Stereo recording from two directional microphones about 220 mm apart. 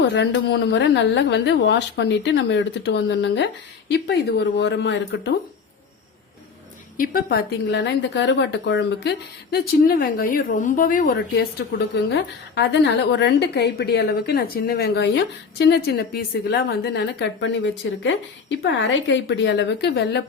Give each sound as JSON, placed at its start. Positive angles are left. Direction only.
{"t": 0.1, "sound": "a woman's voice", "side_deg": 55}
{"t": 6.9, "sound": "a woman's voice", "side_deg": 40}
{"t": 12.1, "sound": "a woman's voice", "side_deg": 50}